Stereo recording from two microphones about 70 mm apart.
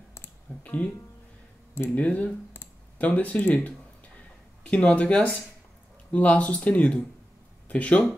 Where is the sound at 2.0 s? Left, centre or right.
Centre.